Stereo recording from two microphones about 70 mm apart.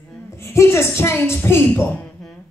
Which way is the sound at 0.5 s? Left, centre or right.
Left.